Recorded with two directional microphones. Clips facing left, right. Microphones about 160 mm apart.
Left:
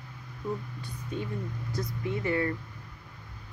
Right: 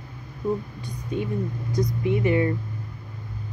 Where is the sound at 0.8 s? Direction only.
15° right (ahead or behind).